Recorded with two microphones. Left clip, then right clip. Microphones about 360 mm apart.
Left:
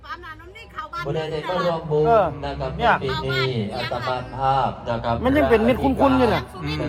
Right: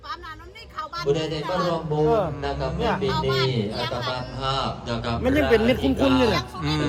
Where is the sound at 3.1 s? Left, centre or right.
Centre.